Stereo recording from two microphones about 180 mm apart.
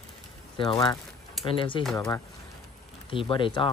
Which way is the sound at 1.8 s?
5° left (ahead or behind).